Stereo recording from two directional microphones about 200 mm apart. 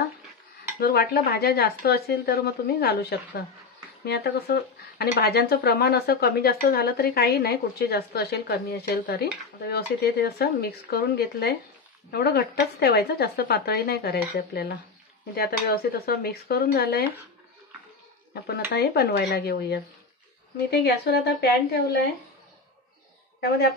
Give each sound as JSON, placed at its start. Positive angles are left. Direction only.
{"t": 0.7, "sound": "speech", "side_deg": 50}
{"t": 18.3, "sound": "speech", "side_deg": 55}